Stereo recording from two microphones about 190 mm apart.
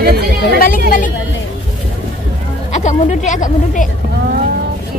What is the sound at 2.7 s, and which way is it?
Speech, 40° left (ahead or behind).